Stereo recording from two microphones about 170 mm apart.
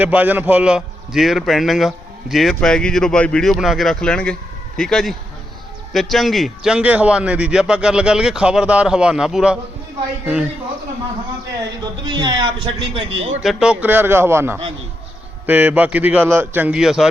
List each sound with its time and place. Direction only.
0.0 s a man's voice: 10° right (ahead or behind)
11.8 s speech: 25° right (ahead or behind)
13.4 s a man's voice: centre (ahead or behind)